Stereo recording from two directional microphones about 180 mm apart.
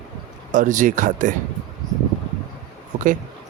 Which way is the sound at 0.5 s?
45° right (ahead or behind).